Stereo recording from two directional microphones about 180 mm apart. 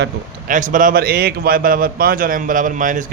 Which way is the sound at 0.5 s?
45° right (ahead or behind).